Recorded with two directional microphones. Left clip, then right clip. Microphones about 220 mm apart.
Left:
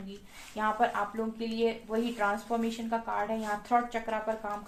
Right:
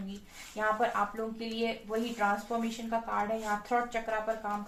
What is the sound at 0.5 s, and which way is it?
A woman's voice, 45° left (ahead or behind).